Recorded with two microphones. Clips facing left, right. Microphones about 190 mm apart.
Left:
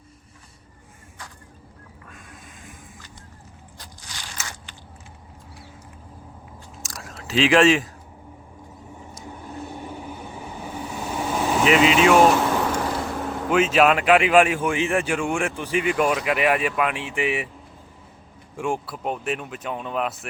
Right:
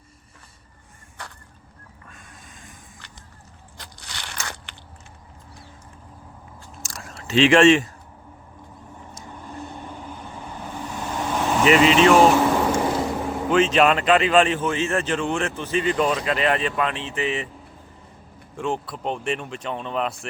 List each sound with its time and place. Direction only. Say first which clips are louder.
1.2 s fowl: right 3 dB; 65° right (ahead or behind)
2.0 s a sound: left 2 dB; 5° left (ahead or behind)
3.8 s biting: right 3 dB; 65° right (ahead or behind)
6.8 s biting: even; centre (ahead or behind)
9.2 s vehicle: left 1 dB; 5° left (ahead or behind)
13.5 s a man's voice: even; 5° left (ahead or behind)
18.5 s speech: even; 10° left (ahead or behind)